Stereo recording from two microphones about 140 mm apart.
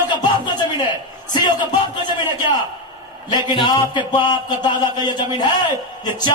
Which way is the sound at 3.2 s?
30° left (ahead or behind).